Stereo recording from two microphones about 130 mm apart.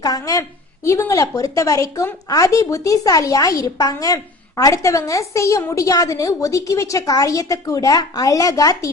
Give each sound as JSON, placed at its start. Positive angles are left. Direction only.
{"t": 0.0, "sound": "speech", "side_deg": 25}